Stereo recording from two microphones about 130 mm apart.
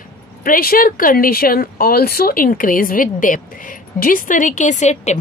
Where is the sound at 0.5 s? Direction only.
90° left.